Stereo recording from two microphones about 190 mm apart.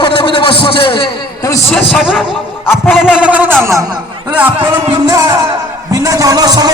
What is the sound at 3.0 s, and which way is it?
Speech, 5° right (ahead or behind).